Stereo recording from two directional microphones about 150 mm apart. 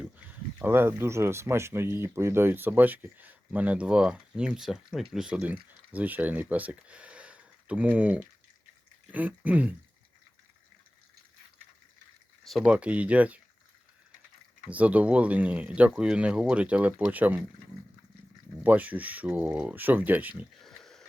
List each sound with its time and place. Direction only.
0.6 s speech: 15° right (ahead or behind)
12.5 s speech: 5° right (ahead or behind)
14.7 s speech: 10° right (ahead or behind)
18.6 s speech: 10° right (ahead or behind)
20.6 s a sound: centre (ahead or behind)